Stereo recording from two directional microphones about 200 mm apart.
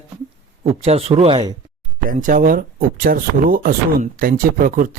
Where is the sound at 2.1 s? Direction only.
40° right (ahead or behind).